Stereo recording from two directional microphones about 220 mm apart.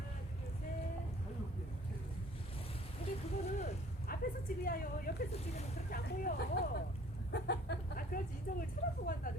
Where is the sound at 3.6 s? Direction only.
40° left (ahead or behind).